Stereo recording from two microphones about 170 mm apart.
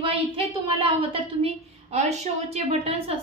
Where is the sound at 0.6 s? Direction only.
35° right (ahead or behind).